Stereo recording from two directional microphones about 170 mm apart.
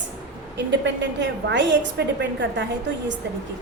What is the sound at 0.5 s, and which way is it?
A woman's voice, 90° right.